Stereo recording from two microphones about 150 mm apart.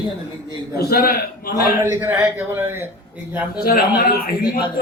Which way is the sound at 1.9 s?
10° right (ahead or behind).